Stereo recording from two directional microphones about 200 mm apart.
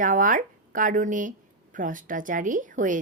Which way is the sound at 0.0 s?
40° right (ahead or behind).